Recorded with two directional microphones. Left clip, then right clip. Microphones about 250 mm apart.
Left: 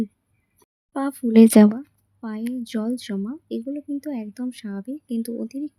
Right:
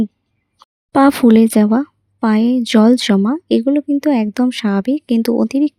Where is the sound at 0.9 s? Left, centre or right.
Right.